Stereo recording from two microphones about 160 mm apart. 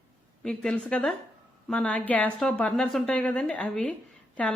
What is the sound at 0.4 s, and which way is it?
A woman's voice, 5° left (ahead or behind).